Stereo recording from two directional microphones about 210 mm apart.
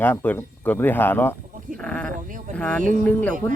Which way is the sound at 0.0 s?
10° left (ahead or behind).